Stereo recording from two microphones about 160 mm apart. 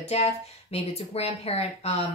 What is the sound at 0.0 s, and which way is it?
A woman's voice, 40° left (ahead or behind).